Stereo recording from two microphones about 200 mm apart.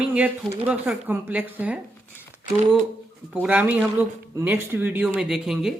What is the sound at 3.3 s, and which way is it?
Speech, 5° right (ahead or behind).